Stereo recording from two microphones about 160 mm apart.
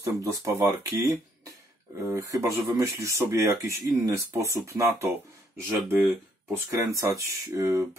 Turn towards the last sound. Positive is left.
turn(degrees=-20)  # may be behind; listen again after turning